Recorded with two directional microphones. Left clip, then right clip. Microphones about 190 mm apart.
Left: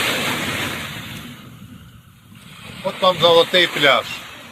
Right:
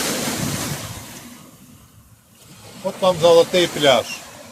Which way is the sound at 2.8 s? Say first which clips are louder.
Even; 5° right (ahead or behind).